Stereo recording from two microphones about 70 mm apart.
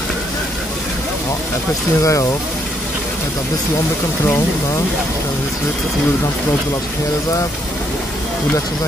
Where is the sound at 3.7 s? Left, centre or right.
Left.